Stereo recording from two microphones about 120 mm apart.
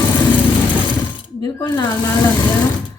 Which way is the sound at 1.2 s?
40° left (ahead or behind).